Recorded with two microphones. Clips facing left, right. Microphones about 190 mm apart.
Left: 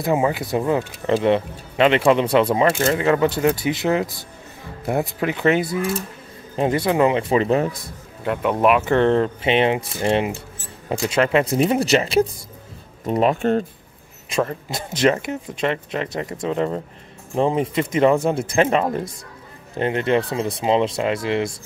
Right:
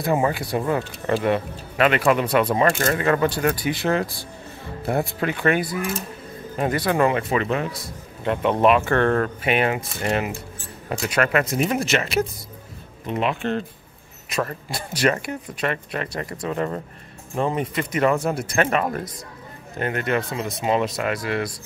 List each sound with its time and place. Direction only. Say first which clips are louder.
0.1 s speech: left 2 dB; 15° left (ahead or behind)
2.4 s speech: left 2 dB; 15° left (ahead or behind)
7.4 s speech: left 5 dB; 35° left (ahead or behind)
8.3 s speech: even; 5° left (ahead or behind); by 13.7 s 40° left (ahead or behind)
14.7 s speech: left 2 dB; 20° left (ahead or behind)
17.4 s speech: left 4 dB; 25° left (ahead or behind)